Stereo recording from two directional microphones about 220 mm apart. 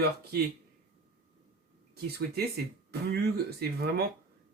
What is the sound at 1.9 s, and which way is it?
A man's voice, 45° right (ahead or behind).